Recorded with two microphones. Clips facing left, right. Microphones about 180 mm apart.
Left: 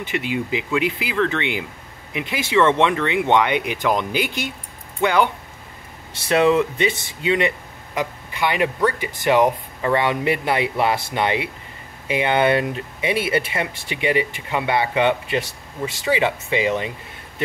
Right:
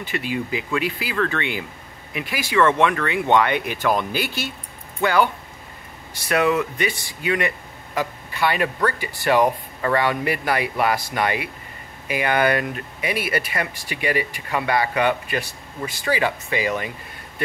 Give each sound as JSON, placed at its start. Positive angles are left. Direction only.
{"t": 0.0, "sound": "speech", "side_deg": 20}